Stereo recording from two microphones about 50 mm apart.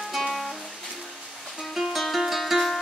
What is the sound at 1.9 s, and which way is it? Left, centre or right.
Music, centre.